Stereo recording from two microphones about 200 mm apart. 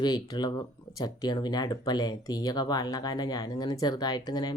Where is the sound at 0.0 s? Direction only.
20° left (ahead or behind).